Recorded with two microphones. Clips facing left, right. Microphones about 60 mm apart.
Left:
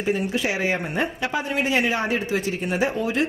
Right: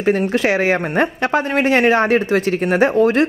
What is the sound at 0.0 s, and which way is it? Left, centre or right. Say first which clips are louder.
Speech: right 7 dB; right.